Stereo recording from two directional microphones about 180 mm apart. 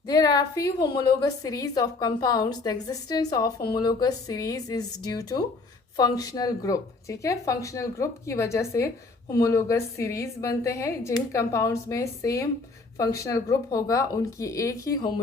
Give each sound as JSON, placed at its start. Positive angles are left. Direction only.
{"t": 0.1, "sound": "a woman's voice", "side_deg": 20}